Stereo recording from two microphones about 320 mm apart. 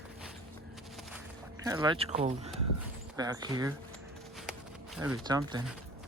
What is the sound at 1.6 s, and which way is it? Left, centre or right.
Speech, centre.